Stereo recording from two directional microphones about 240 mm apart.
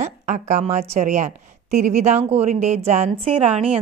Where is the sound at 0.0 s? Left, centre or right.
Right.